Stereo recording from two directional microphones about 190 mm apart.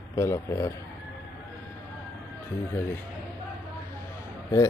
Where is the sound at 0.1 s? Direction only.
15° left (ahead or behind).